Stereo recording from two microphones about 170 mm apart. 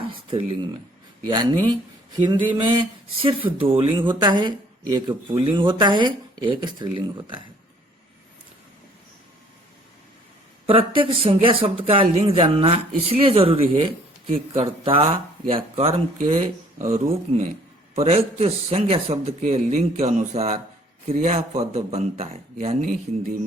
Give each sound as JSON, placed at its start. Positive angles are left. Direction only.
{"t": 0.0, "sound": "a sound", "side_deg": -35}
{"t": 1.3, "sound": "a man's voice", "side_deg": -25}
{"t": 10.7, "sound": "a man's voice", "side_deg": -30}
{"t": 16.9, "sound": "a man's voice", "side_deg": -40}
{"t": 22.8, "sound": "speech", "side_deg": -50}